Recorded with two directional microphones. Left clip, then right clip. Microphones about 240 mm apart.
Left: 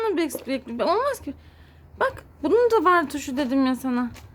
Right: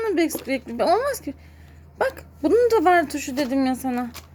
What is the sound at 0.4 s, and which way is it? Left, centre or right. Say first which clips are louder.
Speech: right 2 dB; centre.